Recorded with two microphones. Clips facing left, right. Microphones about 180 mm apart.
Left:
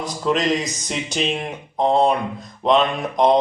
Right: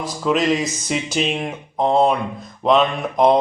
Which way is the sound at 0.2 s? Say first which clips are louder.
Right 1 dB; 5° right (ahead or behind).